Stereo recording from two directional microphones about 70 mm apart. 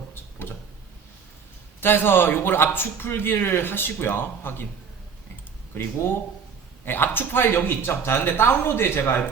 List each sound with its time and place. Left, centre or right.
0.1 s a sound: left
1.8 s a man's voice: left
5.7 s a man's voice: left